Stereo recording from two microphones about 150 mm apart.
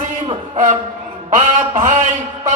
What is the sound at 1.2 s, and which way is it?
Speech, 55° right (ahead or behind).